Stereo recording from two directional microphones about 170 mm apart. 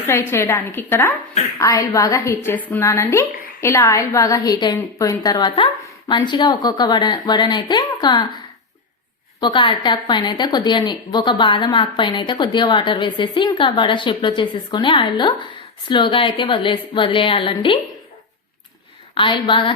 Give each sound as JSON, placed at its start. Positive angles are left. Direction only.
{"t": 0.1, "sound": "a woman's voice", "side_deg": 15}
{"t": 9.4, "sound": "a woman's voice", "side_deg": 30}
{"t": 19.1, "sound": "a woman's voice", "side_deg": 30}